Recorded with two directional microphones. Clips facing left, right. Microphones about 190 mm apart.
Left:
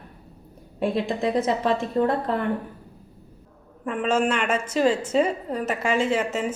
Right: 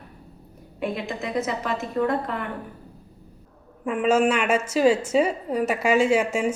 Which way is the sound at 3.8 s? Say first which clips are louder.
Right 3 dB; 10° right (ahead or behind).